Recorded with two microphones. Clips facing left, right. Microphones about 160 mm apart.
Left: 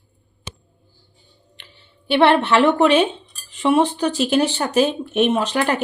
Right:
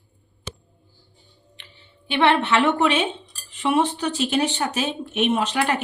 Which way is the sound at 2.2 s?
35° left (ahead or behind).